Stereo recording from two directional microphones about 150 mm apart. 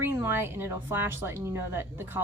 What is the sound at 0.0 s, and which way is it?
Speech, 15° right (ahead or behind).